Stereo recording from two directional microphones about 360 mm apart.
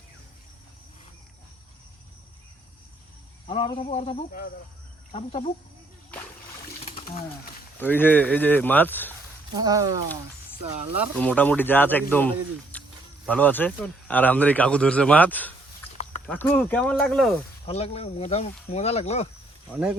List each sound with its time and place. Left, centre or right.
3.4 s speech: centre
6.8 s a sound: centre
7.8 s speech: centre
9.6 s speech: centre
10.9 s speech: centre
12.7 s a sound: centre
13.2 s speech: centre
17.7 s speech: centre
19.7 s speech: centre